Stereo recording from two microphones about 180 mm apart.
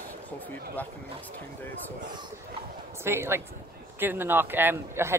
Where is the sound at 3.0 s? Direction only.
15° right (ahead or behind).